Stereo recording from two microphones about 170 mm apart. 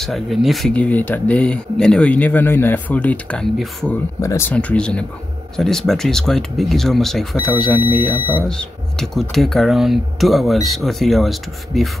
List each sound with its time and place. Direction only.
0.0 s speech: centre (ahead or behind)
4.2 s speech: 15° left (ahead or behind); by 11.9 s centre (ahead or behind)